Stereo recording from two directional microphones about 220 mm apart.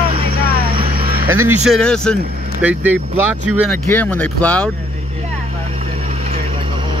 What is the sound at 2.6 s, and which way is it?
Speech, 5° right (ahead or behind).